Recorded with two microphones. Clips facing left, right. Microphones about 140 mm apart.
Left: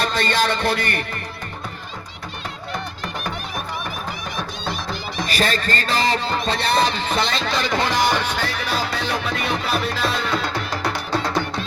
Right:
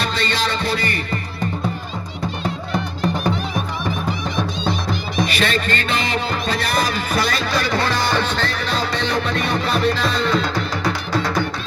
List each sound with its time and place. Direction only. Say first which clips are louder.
0.0 s music: left 2 dB; 50° left (ahead or behind)
4.6 s music: right 5 dB; 20° right (ahead or behind)
5.2 s music: right 1 dB; 40° left (ahead or behind); by 10.2 s centre (ahead or behind)
10.8 s music: right 1 dB; 25° left (ahead or behind)